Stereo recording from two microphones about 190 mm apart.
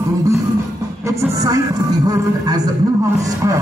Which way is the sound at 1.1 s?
15° right (ahead or behind).